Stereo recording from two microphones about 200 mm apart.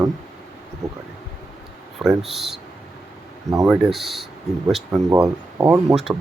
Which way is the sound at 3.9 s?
Centre (ahead or behind).